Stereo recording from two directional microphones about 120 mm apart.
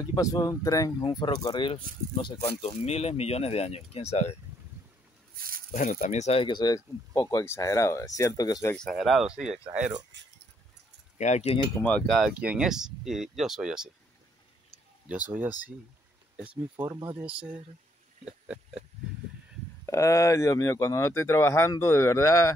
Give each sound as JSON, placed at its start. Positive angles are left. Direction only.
{"t": 0.0, "sound": "speech", "side_deg": 30}
{"t": 5.7, "sound": "speech", "side_deg": 90}
{"t": 6.4, "sound": "speech", "side_deg": 35}
{"t": 8.7, "sound": "speech", "side_deg": 5}
{"t": 11.1, "sound": "speech", "side_deg": 70}
{"t": 11.8, "sound": "a sound", "side_deg": 10}
{"t": 12.2, "sound": "speech", "side_deg": -10}
{"t": 17.2, "sound": "speech", "side_deg": -10}
{"t": 18.2, "sound": "a sound", "side_deg": -5}
{"t": 19.9, "sound": "speech", "side_deg": 25}